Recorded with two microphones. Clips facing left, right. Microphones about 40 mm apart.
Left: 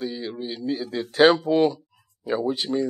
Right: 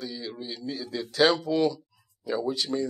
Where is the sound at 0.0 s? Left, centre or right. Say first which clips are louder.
Left 6 dB; left.